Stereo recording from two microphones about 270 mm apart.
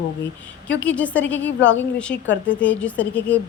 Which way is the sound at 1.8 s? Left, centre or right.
Centre.